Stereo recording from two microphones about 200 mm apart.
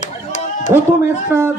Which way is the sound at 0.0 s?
35° left (ahead or behind).